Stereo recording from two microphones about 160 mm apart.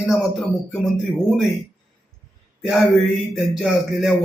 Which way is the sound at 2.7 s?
Centre (ahead or behind).